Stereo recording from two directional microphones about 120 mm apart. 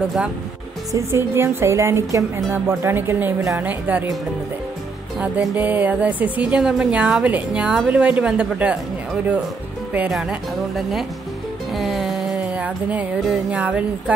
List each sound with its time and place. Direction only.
0.9 s a woman's voice: 20° right (ahead or behind)
5.2 s speech: 10° right (ahead or behind)
11.7 s music: centre (ahead or behind)
13.3 s speech: 10° right (ahead or behind)